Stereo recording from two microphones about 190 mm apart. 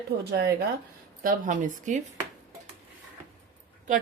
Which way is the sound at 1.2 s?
45° right (ahead or behind).